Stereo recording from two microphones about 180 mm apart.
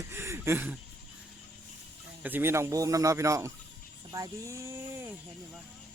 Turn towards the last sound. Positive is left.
turn(degrees=-15)  # may be behind; listen again after turning